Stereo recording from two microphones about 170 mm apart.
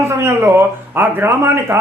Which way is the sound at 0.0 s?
15° right (ahead or behind).